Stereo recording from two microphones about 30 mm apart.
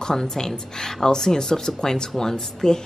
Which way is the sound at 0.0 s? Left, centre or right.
Centre.